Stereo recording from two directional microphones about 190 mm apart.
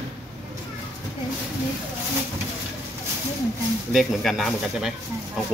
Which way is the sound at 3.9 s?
Centre (ahead or behind).